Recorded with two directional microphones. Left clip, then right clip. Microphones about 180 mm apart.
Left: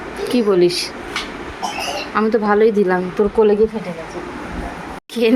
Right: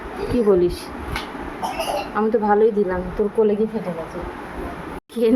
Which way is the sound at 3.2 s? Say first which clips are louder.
Left 4 dB; 25° left (ahead or behind).